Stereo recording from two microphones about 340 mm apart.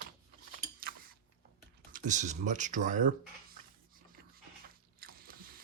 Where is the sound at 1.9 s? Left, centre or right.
Right.